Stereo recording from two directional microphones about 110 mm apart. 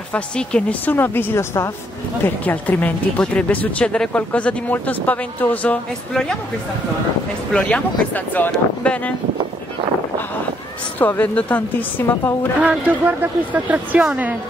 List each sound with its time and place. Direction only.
0.1 s a woman's voice: 10° left (ahead or behind)
7.5 s speech: 10° left (ahead or behind)
11.0 s speech: 15° left (ahead or behind)
12.5 s speech: 15° right (ahead or behind)